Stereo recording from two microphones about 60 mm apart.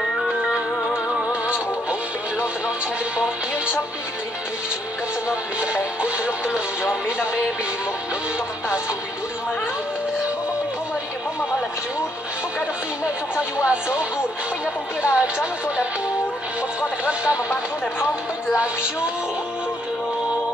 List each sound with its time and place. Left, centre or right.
0.5 s music: centre
5.3 s music: centre
13.7 s a woman's voice: centre
17.0 s a woman's voice: centre